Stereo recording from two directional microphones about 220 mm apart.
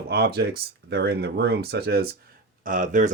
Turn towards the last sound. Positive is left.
turn(degrees=-35)  # may be behind; listen again after turning